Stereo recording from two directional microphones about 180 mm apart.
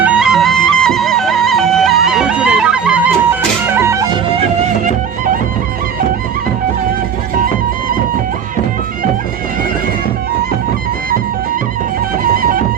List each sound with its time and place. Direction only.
0.0 s music: 5° right (ahead or behind)
12.2 s music: 50° right (ahead or behind)